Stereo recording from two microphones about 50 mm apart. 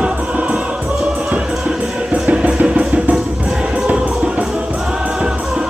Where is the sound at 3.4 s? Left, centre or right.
Centre.